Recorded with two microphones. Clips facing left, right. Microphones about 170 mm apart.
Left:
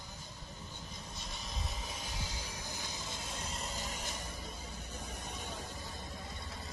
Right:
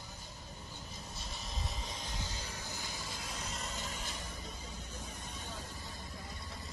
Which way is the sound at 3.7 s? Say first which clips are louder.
Left 1 dB; 40° left (ahead or behind).